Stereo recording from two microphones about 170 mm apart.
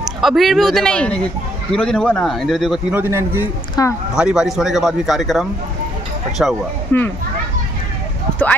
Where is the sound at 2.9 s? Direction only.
15° right (ahead or behind).